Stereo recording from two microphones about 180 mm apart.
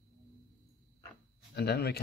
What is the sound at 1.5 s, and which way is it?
Speech, 60° left (ahead or behind).